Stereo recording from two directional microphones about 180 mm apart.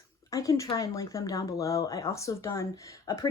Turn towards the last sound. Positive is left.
turn(degrees=15)  # may be behind; listen again after turning